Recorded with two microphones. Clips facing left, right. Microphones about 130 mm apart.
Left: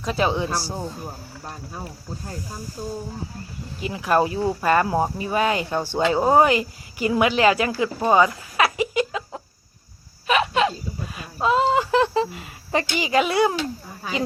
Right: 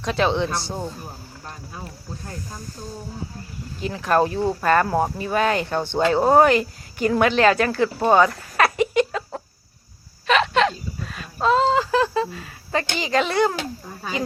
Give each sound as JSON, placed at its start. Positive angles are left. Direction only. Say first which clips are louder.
{"t": 0.0, "sound": "speech", "louder": "right 1 dB", "side_deg": 5}
{"t": 3.8, "sound": "speech", "louder": "right 1 dB", "side_deg": 10}
{"t": 9.0, "sound": "chicken", "louder": "right 3 dB", "side_deg": 5}
{"t": 10.2, "sound": "hiccup", "louder": "right 1 dB", "side_deg": 10}
{"t": 13.0, "sound": "speech", "louder": "left 1 dB", "side_deg": 10}